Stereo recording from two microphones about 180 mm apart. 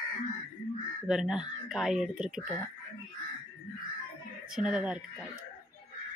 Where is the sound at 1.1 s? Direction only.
5° right (ahead or behind).